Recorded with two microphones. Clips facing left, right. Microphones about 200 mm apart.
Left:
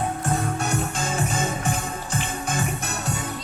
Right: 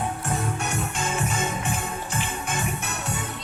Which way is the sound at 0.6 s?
35° left (ahead or behind).